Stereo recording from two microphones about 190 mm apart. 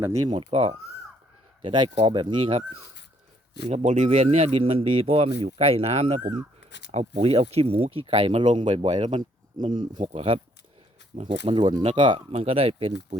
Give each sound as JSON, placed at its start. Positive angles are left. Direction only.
{"t": 0.0, "sound": "speech", "side_deg": -15}
{"t": 3.7, "sound": "speech", "side_deg": -40}
{"t": 6.7, "sound": "a sound", "side_deg": 70}
{"t": 6.9, "sound": "speech", "side_deg": -30}
{"t": 11.4, "sound": "speech", "side_deg": -25}